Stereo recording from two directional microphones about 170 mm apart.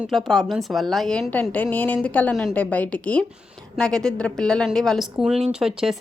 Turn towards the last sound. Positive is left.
turn(degrees=-5)  # may be behind; listen again after turning